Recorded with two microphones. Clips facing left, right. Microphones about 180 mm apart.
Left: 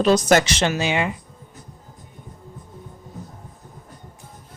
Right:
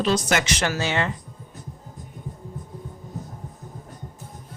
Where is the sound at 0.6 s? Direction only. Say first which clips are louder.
Left 3 dB; 15° left (ahead or behind).